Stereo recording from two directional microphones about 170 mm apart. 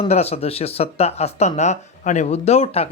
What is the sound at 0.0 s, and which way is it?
Speech, 40° left (ahead or behind).